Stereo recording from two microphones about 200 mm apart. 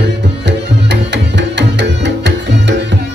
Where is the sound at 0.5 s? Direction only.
60° right (ahead or behind).